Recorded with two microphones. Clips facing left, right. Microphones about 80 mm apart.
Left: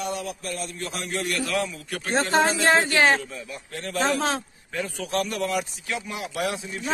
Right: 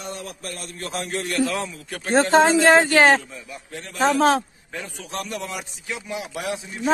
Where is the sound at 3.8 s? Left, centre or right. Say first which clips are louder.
Right 6 dB; right.